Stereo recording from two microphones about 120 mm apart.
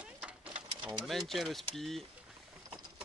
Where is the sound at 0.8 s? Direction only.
Centre (ahead or behind).